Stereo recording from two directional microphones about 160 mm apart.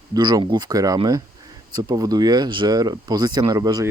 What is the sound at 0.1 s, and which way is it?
Speech, 25° right (ahead or behind).